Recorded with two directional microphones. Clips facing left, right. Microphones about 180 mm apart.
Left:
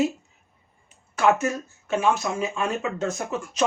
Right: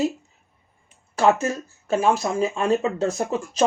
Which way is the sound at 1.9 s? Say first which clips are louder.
Right 3 dB; 35° right (ahead or behind).